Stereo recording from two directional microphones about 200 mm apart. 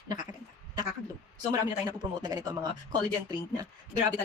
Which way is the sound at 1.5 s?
20° right (ahead or behind).